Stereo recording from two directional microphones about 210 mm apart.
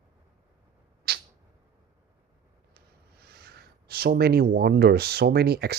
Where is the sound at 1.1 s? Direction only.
50° right (ahead or behind).